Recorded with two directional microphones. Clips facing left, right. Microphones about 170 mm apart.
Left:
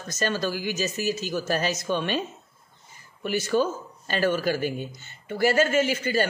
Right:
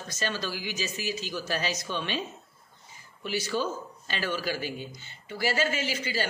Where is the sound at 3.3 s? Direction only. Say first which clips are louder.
Left 6 dB; 50° left (ahead or behind).